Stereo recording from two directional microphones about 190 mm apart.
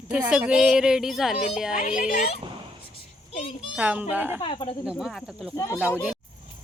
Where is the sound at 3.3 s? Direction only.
30° left (ahead or behind).